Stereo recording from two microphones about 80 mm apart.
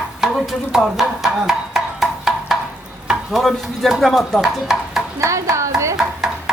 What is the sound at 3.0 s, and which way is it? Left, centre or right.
Stir, centre.